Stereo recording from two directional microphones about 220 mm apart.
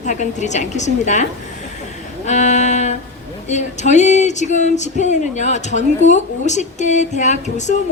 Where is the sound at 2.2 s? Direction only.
35° left (ahead or behind).